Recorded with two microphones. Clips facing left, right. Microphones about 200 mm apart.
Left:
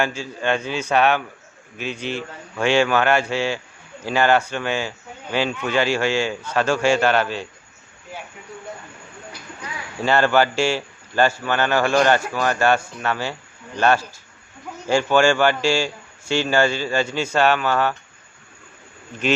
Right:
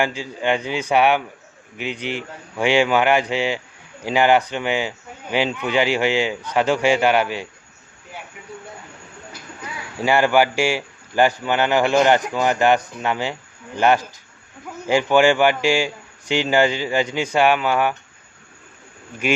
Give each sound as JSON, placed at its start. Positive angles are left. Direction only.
{"t": 0.0, "sound": "speech", "side_deg": -15}
{"t": 10.0, "sound": "speech", "side_deg": -15}
{"t": 19.1, "sound": "speech", "side_deg": -10}